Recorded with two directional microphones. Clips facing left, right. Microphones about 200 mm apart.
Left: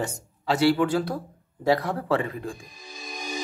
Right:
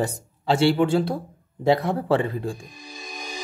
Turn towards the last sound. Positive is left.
turn(degrees=0)  # may be behind; listen again after turning